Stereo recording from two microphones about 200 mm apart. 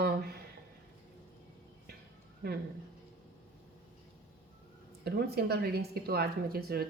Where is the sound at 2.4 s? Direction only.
55° right (ahead or behind).